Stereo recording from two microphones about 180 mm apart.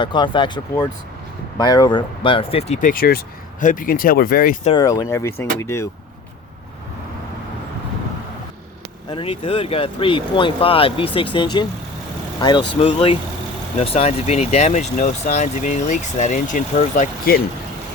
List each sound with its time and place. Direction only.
0.0 s speech: 25° left (ahead or behind); by 4.5 s 55° left (ahead or behind)
4.8 s speech: 20° left (ahead or behind)
9.0 s speech: 30° left (ahead or behind); by 17.4 s 55° left (ahead or behind)